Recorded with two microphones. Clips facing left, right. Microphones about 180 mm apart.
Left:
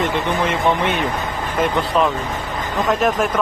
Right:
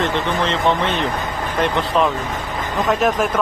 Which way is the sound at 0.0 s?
10° left (ahead or behind).